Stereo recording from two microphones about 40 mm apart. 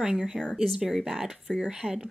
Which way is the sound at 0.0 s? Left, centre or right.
Centre.